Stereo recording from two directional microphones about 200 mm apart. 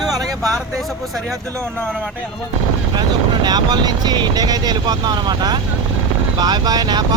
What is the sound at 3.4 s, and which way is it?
Speech, 20° right (ahead or behind).